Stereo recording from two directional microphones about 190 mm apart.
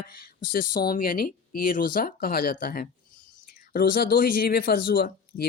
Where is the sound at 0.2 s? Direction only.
50° left (ahead or behind).